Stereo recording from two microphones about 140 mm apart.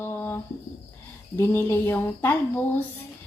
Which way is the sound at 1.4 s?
20° left (ahead or behind).